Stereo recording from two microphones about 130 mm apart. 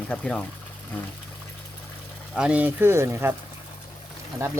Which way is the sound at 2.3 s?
10° right (ahead or behind).